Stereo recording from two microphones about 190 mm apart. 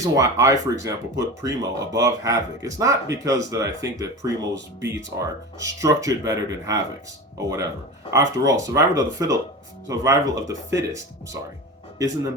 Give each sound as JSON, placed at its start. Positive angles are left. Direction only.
{"t": 0.0, "sound": "speech", "side_deg": -20}